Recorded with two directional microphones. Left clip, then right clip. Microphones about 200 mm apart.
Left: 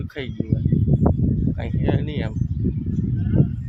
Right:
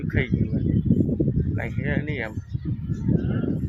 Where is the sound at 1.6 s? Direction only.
5° left (ahead or behind).